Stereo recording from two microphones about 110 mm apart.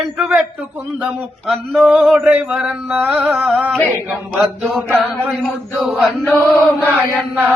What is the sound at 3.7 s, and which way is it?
A man's voice, 5° left (ahead or behind).